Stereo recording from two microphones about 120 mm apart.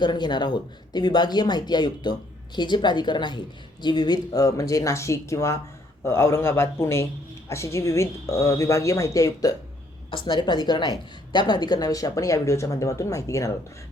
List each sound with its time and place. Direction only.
0.0 s a woman's voice: 40° left (ahead or behind)